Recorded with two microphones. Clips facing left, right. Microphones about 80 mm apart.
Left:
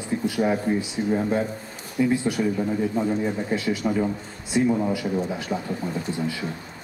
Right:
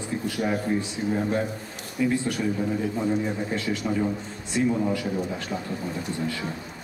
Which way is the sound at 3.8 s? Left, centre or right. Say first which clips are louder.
Left 2 dB; centre.